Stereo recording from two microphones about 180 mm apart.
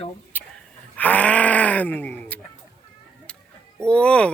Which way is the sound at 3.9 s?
5° left (ahead or behind).